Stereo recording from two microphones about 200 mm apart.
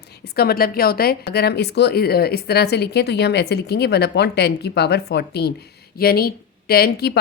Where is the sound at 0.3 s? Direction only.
50° left (ahead or behind).